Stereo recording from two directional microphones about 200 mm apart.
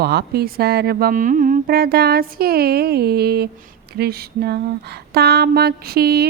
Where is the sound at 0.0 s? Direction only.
55° right (ahead or behind).